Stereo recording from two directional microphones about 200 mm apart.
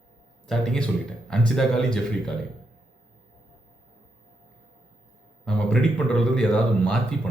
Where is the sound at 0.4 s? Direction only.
Centre (ahead or behind).